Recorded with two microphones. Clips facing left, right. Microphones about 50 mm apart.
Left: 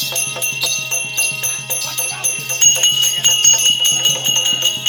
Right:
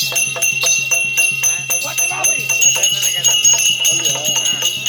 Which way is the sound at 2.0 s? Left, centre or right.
Right.